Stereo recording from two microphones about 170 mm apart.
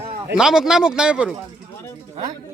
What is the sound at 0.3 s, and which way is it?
Speech, 5° right (ahead or behind).